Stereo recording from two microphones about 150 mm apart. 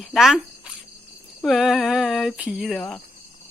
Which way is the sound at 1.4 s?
Centre (ahead or behind).